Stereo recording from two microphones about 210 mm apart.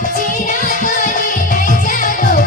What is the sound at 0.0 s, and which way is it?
Music, 40° left (ahead or behind).